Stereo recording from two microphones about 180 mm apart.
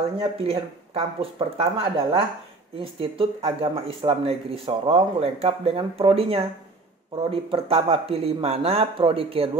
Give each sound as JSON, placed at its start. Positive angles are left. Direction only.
{"t": 0.2, "sound": "speech", "side_deg": -35}